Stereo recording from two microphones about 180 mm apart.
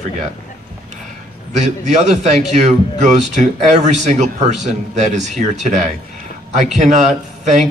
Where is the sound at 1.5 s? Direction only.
40° right (ahead or behind).